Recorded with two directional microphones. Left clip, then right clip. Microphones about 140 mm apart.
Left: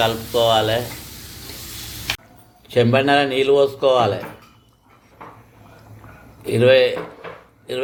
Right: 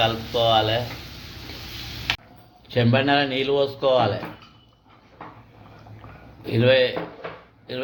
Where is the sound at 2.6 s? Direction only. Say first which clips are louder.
Left 5 dB; 25° left (ahead or behind).